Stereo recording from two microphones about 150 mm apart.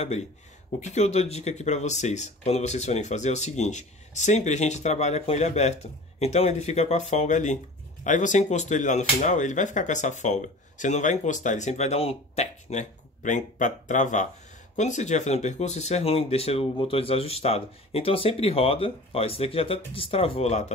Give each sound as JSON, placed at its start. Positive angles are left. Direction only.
{"t": 0.7, "sound": "speech", "side_deg": 50}